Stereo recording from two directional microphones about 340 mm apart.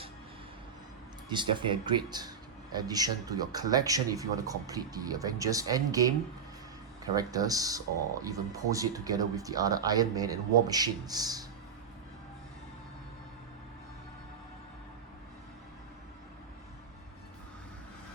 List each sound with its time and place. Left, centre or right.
1.3 s speech: centre